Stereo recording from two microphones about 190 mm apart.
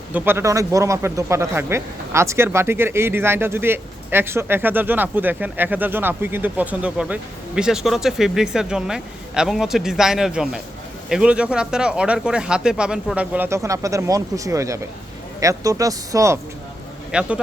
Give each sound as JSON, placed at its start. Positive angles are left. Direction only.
{"t": 0.1, "sound": "speech", "side_deg": -10}
{"t": 17.1, "sound": "speech", "side_deg": -5}